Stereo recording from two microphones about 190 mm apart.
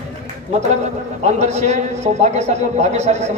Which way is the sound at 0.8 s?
35° right (ahead or behind).